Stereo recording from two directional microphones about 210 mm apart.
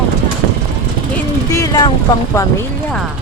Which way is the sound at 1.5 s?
15° left (ahead or behind).